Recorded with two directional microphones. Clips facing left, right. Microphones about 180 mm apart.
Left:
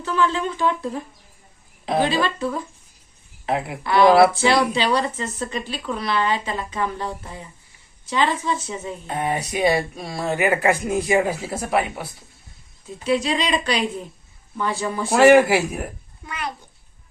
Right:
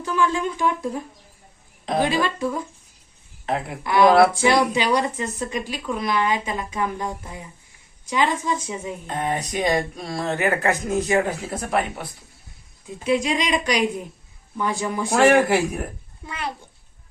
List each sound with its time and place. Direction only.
0.0 s speech: 10° right (ahead or behind)
2.0 s speech: 10° right (ahead or behind)
3.4 s a woman's voice: 5° left (ahead or behind)
4.4 s speech: 15° right (ahead or behind)
9.0 s speech: 10° left (ahead or behind)
13.1 s speech: 15° right (ahead or behind)
15.1 s speech: 5° left (ahead or behind)
16.2 s a child's voice: 25° right (ahead or behind)